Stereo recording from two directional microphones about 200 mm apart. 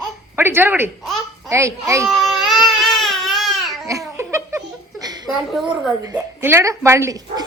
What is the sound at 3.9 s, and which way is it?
Laughter, 15° right (ahead or behind).